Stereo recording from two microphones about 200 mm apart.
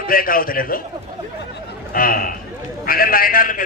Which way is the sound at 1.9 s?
45° left (ahead or behind).